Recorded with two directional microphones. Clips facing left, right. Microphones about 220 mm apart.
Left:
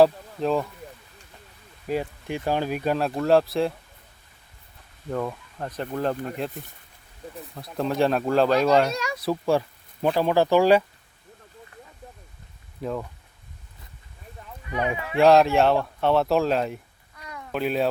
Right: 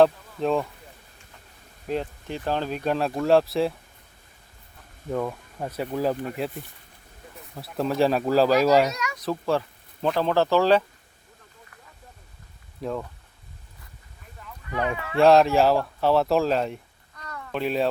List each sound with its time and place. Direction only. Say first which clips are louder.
0.0 s speech: left 1 dB; centre (ahead or behind)
1.9 s speech: left 1 dB; 10° left (ahead or behind)
5.1 s speech: right 1 dB; 5° right (ahead or behind)
7.5 s speech: right 1 dB; 5° right (ahead or behind)
8.9 s speech: left 3 dB; 30° left (ahead or behind)
9.1 s a sound: left 3 dB; 10° left (ahead or behind)
10.2 s speech: left 2 dB; 10° left (ahead or behind)
12.8 s speech: even; centre (ahead or behind)
14.7 s speech: left 1 dB; 15° left (ahead or behind)
15.2 s speech: even; centre (ahead or behind)
17.6 s speech: even; centre (ahead or behind)